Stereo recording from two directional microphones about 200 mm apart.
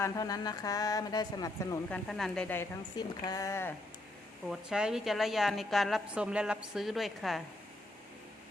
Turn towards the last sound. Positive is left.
turn(degrees=0)  # may be behind; listen again after turning